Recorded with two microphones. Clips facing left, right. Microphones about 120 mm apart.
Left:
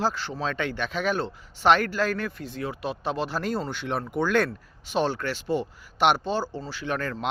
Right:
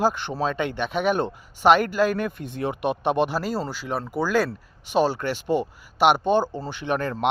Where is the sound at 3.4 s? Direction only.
5° right (ahead or behind).